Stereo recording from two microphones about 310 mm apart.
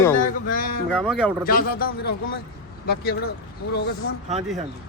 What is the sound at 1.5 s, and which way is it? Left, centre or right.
A man's voice, left.